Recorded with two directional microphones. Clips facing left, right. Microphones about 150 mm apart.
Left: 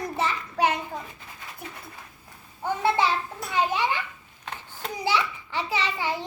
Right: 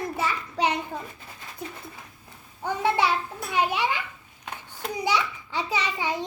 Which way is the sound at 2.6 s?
15° right (ahead or behind).